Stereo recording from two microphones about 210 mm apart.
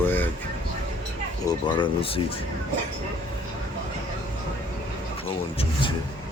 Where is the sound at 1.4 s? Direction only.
25° left (ahead or behind).